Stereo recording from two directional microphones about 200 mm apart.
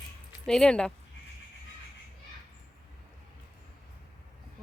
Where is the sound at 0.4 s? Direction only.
5° left (ahead or behind).